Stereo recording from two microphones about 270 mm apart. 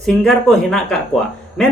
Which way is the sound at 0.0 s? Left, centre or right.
Centre.